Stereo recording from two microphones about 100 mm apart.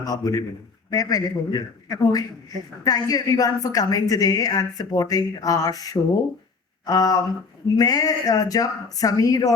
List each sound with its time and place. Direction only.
0.0 s a woman's voice: 40° left (ahead or behind)